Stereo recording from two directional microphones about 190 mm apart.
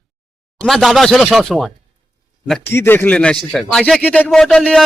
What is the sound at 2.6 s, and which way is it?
A man's voice, 10° left (ahead or behind).